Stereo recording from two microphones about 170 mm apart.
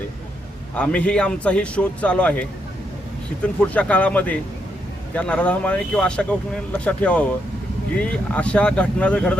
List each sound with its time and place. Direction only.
0.8 s speech: 5° left (ahead or behind)